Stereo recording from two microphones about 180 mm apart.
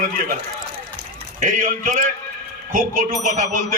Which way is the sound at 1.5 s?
45° right (ahead or behind).